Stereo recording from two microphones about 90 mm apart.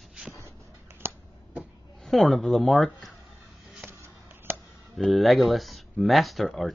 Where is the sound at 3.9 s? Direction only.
30° right (ahead or behind).